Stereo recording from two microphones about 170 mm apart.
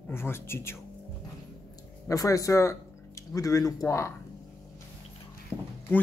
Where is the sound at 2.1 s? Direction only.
20° left (ahead or behind).